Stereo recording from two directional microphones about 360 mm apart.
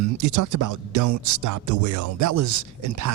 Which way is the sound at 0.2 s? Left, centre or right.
Right.